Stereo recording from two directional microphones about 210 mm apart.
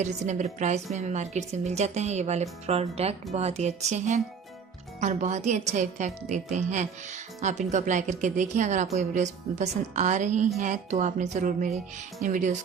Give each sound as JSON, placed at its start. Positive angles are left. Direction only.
{"t": 0.0, "sound": "a woman's voice", "side_deg": -35}